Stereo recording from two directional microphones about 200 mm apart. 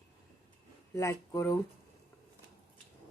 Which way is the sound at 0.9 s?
15° left (ahead or behind).